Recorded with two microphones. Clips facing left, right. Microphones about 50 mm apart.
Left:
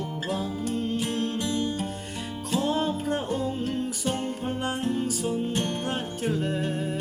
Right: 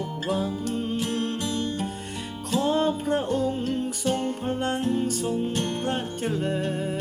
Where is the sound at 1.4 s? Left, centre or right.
Centre.